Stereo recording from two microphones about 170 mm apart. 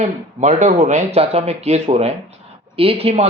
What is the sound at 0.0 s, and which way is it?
Speech, 40° right (ahead or behind).